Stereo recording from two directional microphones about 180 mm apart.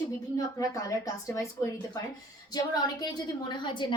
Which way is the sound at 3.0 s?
20° left (ahead or behind).